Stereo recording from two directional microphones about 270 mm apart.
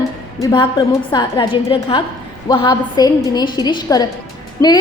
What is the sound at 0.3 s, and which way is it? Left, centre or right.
A woman's voice, centre.